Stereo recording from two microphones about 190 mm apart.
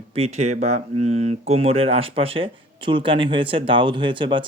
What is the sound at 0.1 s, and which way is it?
Speech, 35° right (ahead or behind).